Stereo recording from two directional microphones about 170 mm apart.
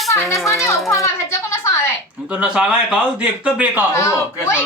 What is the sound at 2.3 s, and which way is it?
Speech, 5° right (ahead or behind).